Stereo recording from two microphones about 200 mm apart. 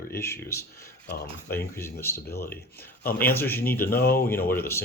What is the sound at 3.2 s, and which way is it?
Speech, 10° left (ahead or behind).